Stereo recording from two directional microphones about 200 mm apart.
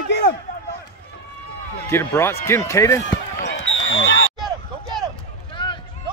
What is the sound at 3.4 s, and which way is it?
Basketball bounce, 70° left (ahead or behind).